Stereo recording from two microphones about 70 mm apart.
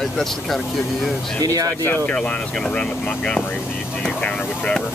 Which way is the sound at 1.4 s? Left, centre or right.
Right.